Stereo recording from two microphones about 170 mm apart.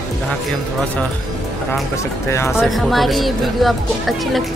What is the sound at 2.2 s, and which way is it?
Speech, 15° left (ahead or behind).